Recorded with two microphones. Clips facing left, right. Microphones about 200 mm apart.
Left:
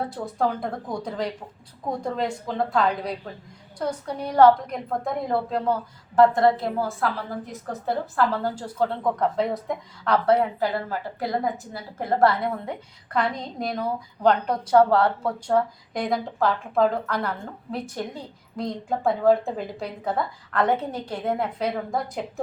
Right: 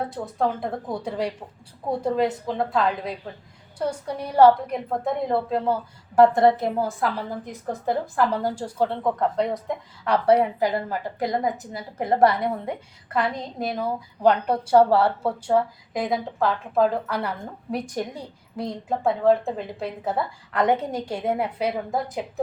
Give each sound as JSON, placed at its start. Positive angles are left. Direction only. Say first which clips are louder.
{"t": 0.1, "sound": "a woman's voice", "louder": "even", "side_deg": 0}
{"t": 6.1, "sound": "a woman's voice", "louder": "right 1 dB", "side_deg": -15}
{"t": 9.1, "sound": "a woman's voice", "louder": "even", "side_deg": 0}
{"t": 10.1, "sound": "a woman's voice", "louder": "right 1 dB", "side_deg": -15}
{"t": 13.1, "sound": "a woman's voice", "louder": "even", "side_deg": -5}